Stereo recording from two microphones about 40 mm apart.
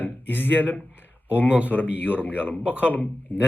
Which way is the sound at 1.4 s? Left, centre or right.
Right.